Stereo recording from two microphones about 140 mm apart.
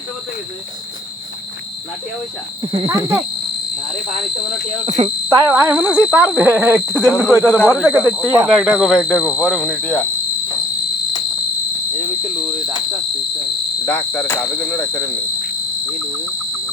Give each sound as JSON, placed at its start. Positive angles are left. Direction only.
{"t": 2.6, "sound": "speech", "side_deg": -35}
{"t": 3.0, "sound": "speech", "side_deg": -15}
{"t": 4.9, "sound": "speech", "side_deg": -40}
{"t": 5.4, "sound": "speech", "side_deg": -15}
{"t": 8.4, "sound": "speech", "side_deg": 0}
{"t": 9.0, "sound": "cricket", "side_deg": 15}
{"t": 13.8, "sound": "cricket", "side_deg": 15}